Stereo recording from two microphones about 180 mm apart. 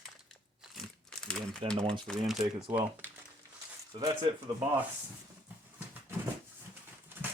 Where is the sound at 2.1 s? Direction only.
Centre (ahead or behind).